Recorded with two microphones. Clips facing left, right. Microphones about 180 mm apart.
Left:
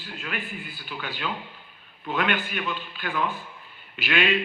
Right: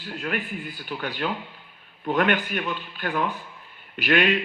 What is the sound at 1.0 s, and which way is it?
A man's voice, 60° right (ahead or behind).